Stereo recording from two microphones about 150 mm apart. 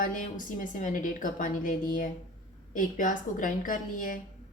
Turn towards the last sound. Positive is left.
turn(degrees=65)  # may be behind; listen again after turning